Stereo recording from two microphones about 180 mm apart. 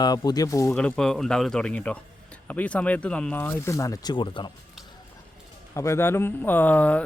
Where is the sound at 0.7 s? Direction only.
5° left (ahead or behind); by 4.5 s 25° left (ahead or behind).